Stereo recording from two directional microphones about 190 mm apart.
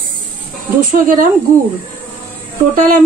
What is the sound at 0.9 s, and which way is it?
Speech, 45° right (ahead or behind).